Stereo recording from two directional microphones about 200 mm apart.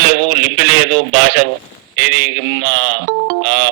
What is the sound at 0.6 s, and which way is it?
Speech, 70° right (ahead or behind).